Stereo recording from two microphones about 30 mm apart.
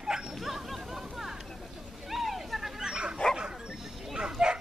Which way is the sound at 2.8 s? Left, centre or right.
Right.